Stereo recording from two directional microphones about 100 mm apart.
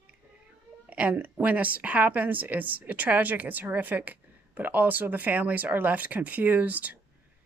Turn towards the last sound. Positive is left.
turn(degrees=-15)  # may be behind; listen again after turning